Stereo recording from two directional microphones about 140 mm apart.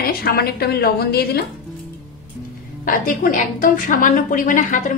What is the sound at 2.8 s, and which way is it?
A woman's voice, 85° left.